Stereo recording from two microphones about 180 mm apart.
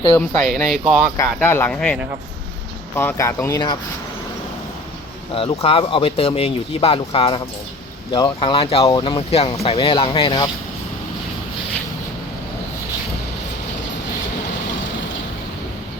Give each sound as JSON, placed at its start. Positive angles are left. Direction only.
{"t": 0.4, "sound": "speech", "side_deg": 0}
{"t": 1.1, "sound": "speech", "side_deg": 15}
{"t": 5.3, "sound": "speech", "side_deg": 30}